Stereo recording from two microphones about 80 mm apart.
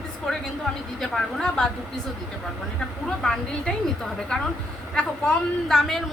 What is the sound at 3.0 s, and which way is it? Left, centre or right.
A woman's voice, centre.